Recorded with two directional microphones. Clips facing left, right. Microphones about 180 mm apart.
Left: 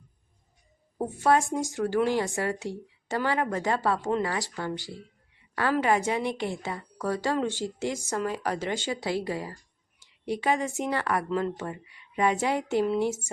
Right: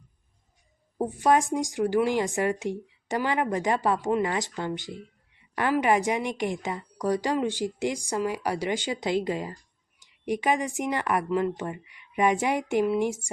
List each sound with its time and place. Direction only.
0.9 s speech: 15° right (ahead or behind)